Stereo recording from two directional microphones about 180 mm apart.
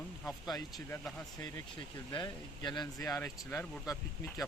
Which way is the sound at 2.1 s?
25° left (ahead or behind).